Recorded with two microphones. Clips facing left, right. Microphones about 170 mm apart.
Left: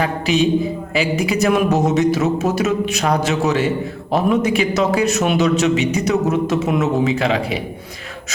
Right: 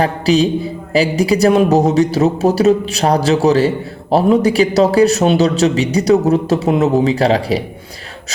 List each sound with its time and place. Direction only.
0.0 s a man's voice: 35° right (ahead or behind)